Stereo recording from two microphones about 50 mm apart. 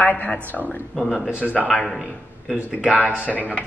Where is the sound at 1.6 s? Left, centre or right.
Centre.